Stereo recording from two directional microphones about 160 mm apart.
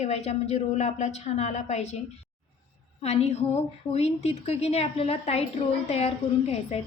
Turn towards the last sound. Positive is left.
turn(degrees=40)  # may be behind; listen again after turning